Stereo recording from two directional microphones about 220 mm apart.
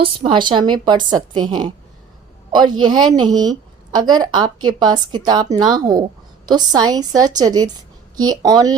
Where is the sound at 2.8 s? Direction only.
20° right (ahead or behind).